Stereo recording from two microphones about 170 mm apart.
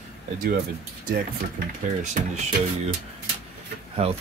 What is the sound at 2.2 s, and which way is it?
Speech, 50° right (ahead or behind).